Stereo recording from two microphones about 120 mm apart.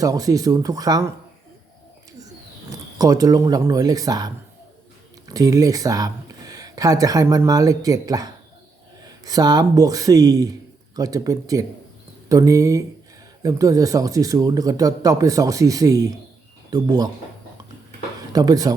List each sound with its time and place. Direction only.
0.0 s speech: 30° right (ahead or behind)
3.0 s speech: 30° right (ahead or behind)
5.3 s speech: 30° right (ahead or behind)
18.3 s speech: 30° right (ahead or behind)